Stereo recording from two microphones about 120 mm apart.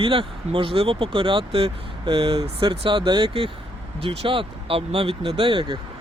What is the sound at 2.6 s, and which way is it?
Speech, 40° right (ahead or behind).